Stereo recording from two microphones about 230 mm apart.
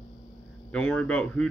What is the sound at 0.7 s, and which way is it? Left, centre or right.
Speech, centre.